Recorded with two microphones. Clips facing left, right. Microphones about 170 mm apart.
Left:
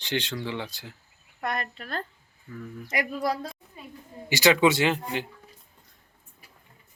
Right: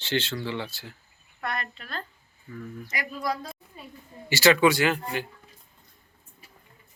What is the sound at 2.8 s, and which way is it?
Speech, 60° left (ahead or behind).